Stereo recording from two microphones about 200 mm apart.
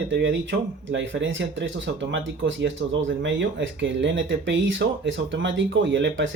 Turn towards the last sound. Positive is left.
turn(degrees=-70)  # may be behind; listen again after turning